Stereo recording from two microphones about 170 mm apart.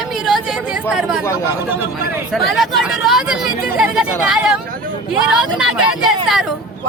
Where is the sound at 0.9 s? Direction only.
5° right (ahead or behind).